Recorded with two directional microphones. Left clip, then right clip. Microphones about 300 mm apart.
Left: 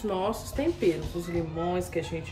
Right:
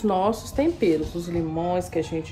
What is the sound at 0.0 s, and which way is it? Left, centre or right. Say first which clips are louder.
A woman's voice: right 7 dB; right.